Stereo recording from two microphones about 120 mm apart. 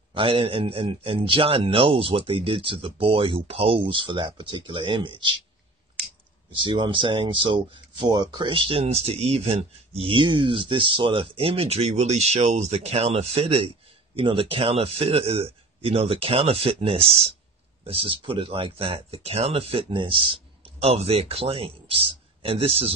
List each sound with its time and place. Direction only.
0.1 s speech: 50° right (ahead or behind)
6.5 s speech: 45° right (ahead or behind)
20.6 s speech: 60° right (ahead or behind)